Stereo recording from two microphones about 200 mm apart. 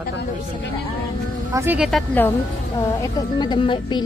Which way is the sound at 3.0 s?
20° left (ahead or behind).